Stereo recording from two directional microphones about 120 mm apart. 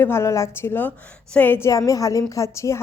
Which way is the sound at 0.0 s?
20° left (ahead or behind).